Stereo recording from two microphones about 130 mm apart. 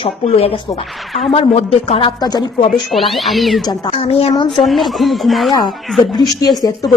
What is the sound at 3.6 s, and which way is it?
Speech, 45° left (ahead or behind).